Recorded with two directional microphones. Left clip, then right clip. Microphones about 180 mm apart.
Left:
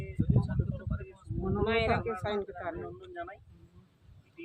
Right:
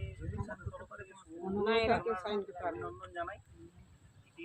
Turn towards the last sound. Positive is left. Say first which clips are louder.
# right 1 dB
turn(degrees=0)  # may be behind; listen again after turning